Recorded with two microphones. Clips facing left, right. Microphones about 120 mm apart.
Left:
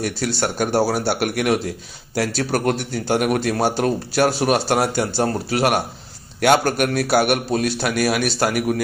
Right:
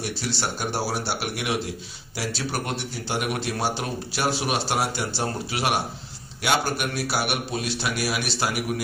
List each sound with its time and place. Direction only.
0.0 s a man's voice: 50° left (ahead or behind)